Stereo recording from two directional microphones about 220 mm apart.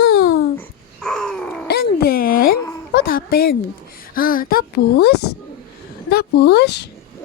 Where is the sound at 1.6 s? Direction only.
45° left (ahead or behind).